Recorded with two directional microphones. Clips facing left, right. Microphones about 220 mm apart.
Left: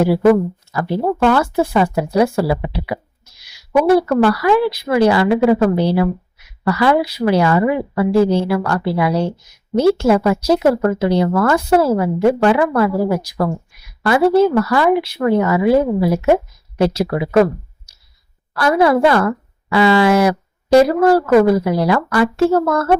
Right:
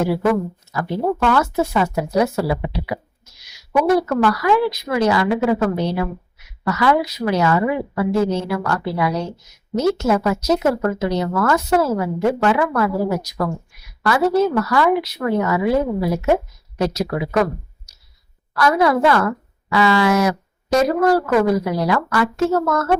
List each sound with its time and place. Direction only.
0.0 s speech: 30° left (ahead or behind)